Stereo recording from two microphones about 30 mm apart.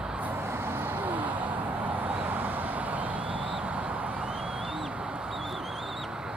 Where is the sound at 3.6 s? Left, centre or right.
Right.